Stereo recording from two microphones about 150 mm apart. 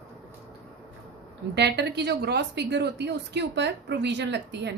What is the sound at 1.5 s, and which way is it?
Speech, 90° right.